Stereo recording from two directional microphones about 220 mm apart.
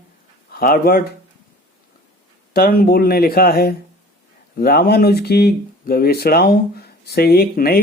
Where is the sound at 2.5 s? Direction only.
45° left (ahead or behind).